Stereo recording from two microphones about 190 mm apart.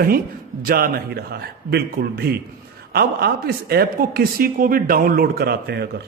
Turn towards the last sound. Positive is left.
turn(degrees=-55)  # may be behind; listen again after turning